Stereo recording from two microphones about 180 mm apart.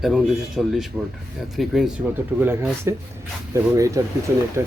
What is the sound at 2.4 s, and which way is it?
Speech, 15° right (ahead or behind).